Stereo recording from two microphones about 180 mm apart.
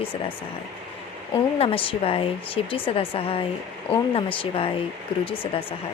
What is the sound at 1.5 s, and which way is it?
Speech, 30° left (ahead or behind).